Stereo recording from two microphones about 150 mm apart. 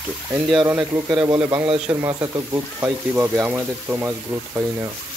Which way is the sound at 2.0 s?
20° right (ahead or behind).